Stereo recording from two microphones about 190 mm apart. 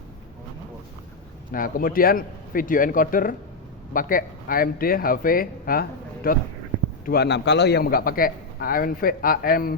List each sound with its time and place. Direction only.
1.5 s a man's voice: 50° left (ahead or behind)